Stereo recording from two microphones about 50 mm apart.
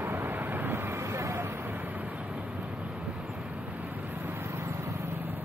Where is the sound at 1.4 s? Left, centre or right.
Right.